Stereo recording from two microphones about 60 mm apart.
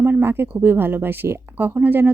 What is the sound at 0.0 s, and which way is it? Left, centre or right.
Speech, right.